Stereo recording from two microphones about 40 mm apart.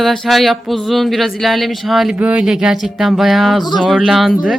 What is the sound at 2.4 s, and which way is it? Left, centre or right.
Speech, centre.